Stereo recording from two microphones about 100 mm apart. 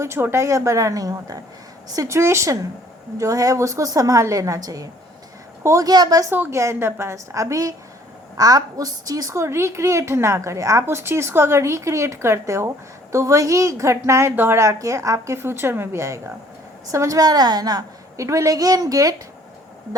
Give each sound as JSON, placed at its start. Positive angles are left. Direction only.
{"t": 0.0, "sound": "a woman's voice", "side_deg": -25}
{"t": 6.5, "sound": "a woman's voice", "side_deg": -30}